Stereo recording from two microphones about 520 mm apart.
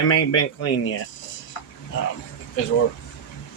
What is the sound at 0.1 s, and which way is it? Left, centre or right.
Speech, left.